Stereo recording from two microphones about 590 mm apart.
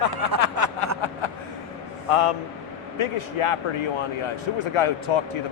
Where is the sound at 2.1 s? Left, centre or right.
Left.